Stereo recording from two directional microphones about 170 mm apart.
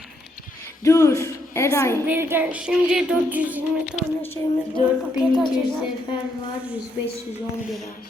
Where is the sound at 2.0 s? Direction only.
15° right (ahead or behind).